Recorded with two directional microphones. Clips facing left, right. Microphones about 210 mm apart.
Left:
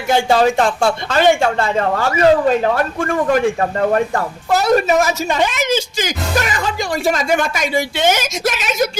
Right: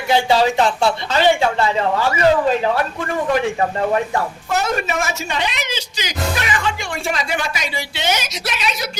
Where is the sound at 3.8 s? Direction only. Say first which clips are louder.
Left 3 dB; 50° left (ahead or behind).